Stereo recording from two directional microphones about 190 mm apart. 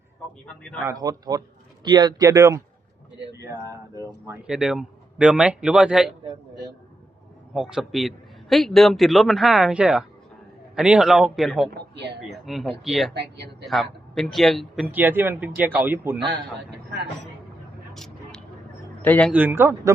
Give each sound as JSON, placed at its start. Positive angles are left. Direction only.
{"t": 0.9, "sound": "a man's voice", "side_deg": -20}
{"t": 4.4, "sound": "a man's voice", "side_deg": -5}
{"t": 7.5, "sound": "a man's voice", "side_deg": 0}
{"t": 11.7, "sound": "a man's voice", "side_deg": -65}
{"t": 12.2, "sound": "a man's voice", "side_deg": 0}
{"t": 13.1, "sound": "a man's voice", "side_deg": -65}
{"t": 13.7, "sound": "a man's voice", "side_deg": 0}
{"t": 16.3, "sound": "a man's voice", "side_deg": -65}
{"t": 17.9, "sound": "vehicle", "side_deg": 0}
{"t": 19.0, "sound": "a man's voice", "side_deg": 10}
{"t": 19.3, "sound": "a man's voice", "side_deg": -10}